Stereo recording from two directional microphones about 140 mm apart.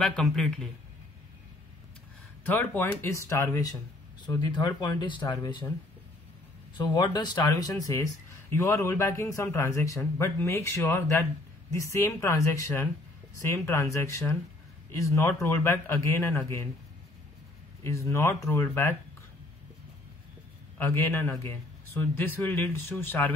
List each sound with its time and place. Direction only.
0.0 s a man's voice: 5° left (ahead or behind)
2.4 s speech: 15° left (ahead or behind); by 5.7 s 35° left (ahead or behind)
6.8 s speech: 30° left (ahead or behind)
17.8 s speech: 20° left (ahead or behind)
20.7 s a man's voice: 15° left (ahead or behind)